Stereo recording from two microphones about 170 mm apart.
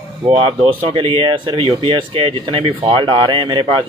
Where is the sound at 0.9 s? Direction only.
30° right (ahead or behind).